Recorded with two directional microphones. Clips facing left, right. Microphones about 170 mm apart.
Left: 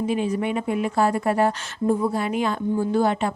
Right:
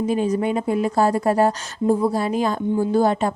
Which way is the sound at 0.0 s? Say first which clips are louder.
Right 3 dB; 40° right (ahead or behind).